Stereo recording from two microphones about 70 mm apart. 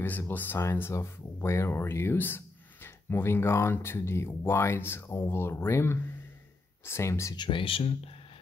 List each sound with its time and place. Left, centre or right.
0.0 s speech: left